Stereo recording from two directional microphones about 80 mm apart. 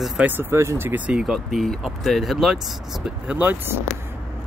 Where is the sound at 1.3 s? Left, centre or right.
Centre.